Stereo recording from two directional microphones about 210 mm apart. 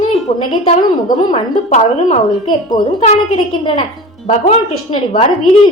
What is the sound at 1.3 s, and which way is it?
A woman's voice, 30° left (ahead or behind).